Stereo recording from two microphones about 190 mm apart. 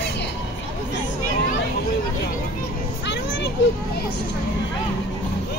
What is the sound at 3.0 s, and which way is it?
Children playing, 65° left (ahead or behind).